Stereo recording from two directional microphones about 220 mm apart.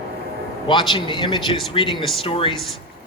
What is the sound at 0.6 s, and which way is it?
A man's voice, 20° left (ahead or behind).